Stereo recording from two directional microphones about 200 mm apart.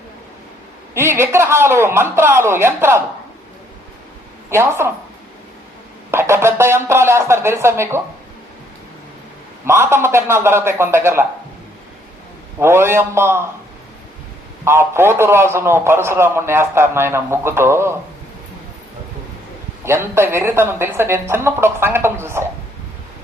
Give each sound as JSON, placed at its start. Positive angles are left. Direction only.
{"t": 0.9, "sound": "a man's voice", "side_deg": -10}
{"t": 4.4, "sound": "a woman's voice", "side_deg": -10}
{"t": 6.1, "sound": "a man's voice", "side_deg": -10}
{"t": 9.6, "sound": "a man's voice", "side_deg": -10}
{"t": 12.5, "sound": "a man's voice", "side_deg": -10}
{"t": 14.6, "sound": "a man's voice", "side_deg": -10}
{"t": 19.8, "sound": "a man's voice", "side_deg": -10}